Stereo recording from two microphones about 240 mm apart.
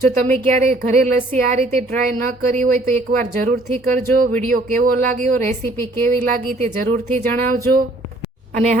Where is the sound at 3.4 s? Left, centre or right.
Right.